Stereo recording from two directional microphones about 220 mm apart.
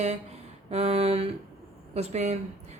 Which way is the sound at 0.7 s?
30° right (ahead or behind).